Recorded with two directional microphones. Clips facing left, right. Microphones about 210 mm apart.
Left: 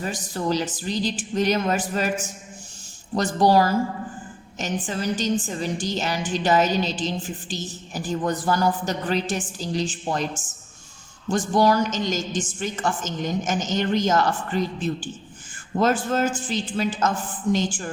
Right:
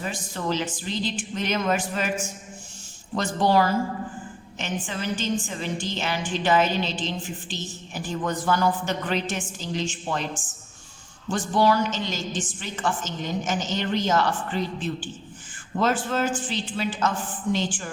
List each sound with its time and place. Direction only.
0.0 s a woman's voice: 35° left (ahead or behind)
3.2 s a woman's voice: 40° left (ahead or behind)
11.3 s a woman's voice: 45° left (ahead or behind)